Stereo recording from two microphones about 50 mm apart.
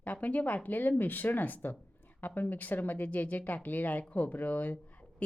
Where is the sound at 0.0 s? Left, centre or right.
Left.